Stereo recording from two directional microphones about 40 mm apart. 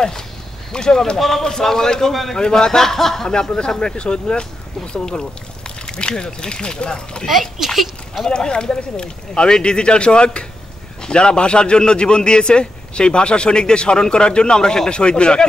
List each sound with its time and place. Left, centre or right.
0.7 s a man's voice: centre
1.1 s a man's voice: centre
2.3 s a man's voice: centre
3.3 s a man's voice: centre
7.2 s speech: centre
8.3 s a man's voice: left